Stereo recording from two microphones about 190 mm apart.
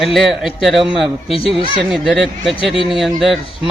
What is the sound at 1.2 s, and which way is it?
Speech, 30° left (ahead or behind).